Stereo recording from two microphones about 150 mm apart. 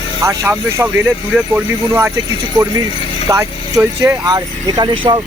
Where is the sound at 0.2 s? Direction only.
15° right (ahead or behind).